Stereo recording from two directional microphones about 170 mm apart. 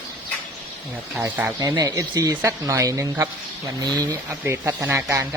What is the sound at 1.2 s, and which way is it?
Speech, 10° right (ahead or behind).